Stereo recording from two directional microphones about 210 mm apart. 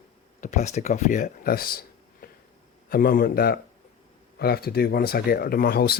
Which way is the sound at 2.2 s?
45° left (ahead or behind).